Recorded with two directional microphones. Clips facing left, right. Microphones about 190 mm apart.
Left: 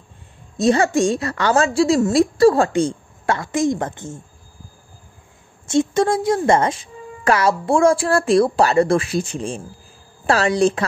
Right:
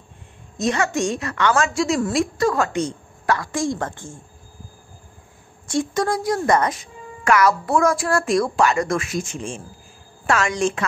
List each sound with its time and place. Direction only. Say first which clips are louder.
0.6 s a woman's voice: left 5 dB; 30° left (ahead or behind)
5.7 s a woman's voice: left 5 dB; 25° left (ahead or behind)